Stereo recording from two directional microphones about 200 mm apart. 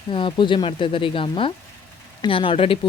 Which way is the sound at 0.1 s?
25° left (ahead or behind).